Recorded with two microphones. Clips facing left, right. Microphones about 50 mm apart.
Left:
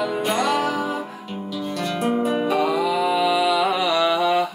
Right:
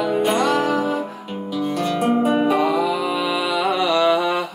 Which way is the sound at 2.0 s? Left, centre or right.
Centre.